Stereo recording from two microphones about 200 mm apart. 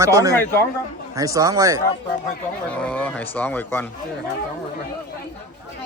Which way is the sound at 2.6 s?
5° left (ahead or behind).